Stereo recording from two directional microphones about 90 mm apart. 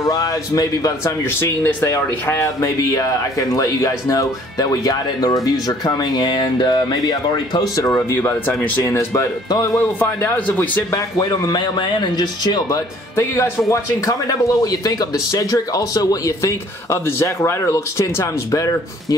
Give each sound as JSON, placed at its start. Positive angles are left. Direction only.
{"t": 0.0, "sound": "speech", "side_deg": 40}
{"t": 7.7, "sound": "speech", "side_deg": 40}
{"t": 8.1, "sound": "speech", "side_deg": 25}
{"t": 8.9, "sound": "speech", "side_deg": 35}
{"t": 10.0, "sound": "speech", "side_deg": 25}
{"t": 11.1, "sound": "speech", "side_deg": 45}